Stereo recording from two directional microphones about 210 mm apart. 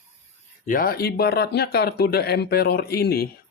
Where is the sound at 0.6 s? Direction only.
45° left (ahead or behind).